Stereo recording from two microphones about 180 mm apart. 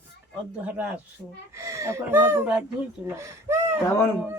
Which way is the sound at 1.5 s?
15° right (ahead or behind).